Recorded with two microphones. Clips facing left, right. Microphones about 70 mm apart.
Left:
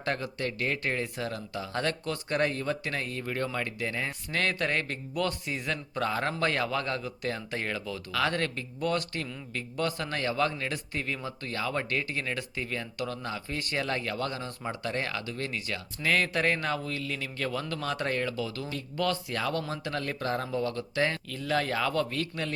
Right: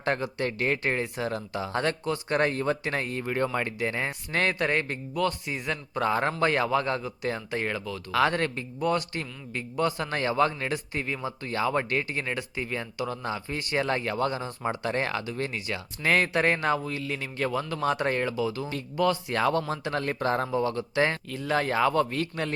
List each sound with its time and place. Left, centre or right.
0.0 s a man's voice: right
1.3 s a man's voice: right
2.3 s a man's voice: right; by 4.9 s centre
5.1 s a man's voice: centre
8.1 s a man's voice: right
8.8 s a man's voice: centre
10.0 s a man's voice: right; by 11.5 s centre
11.5 s a man's voice: right
19.3 s speech: right
19.6 s speech: right
20.5 s a man's voice: right